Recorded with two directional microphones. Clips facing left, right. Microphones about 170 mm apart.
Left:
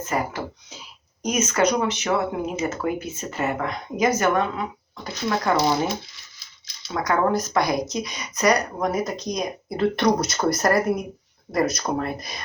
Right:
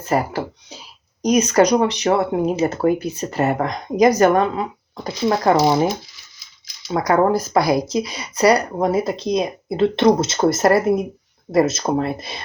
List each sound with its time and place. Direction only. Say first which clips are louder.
0.0 s speech: right 6 dB; 35° right (ahead or behind)
7.1 s speech: right 5 dB; 35° right (ahead or behind)